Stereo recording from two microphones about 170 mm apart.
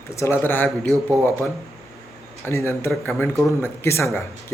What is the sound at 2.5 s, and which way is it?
A man's voice, 15° left (ahead or behind).